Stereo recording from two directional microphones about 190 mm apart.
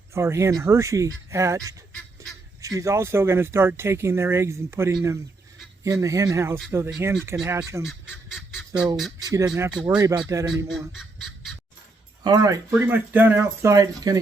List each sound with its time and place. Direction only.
0.1 s speech: 15° right (ahead or behind)
7.9 s goose: 5° right (ahead or behind)
9.3 s speech: 20° right (ahead or behind)
10.7 s speech: centre (ahead or behind)
12.2 s speech: 20° right (ahead or behind)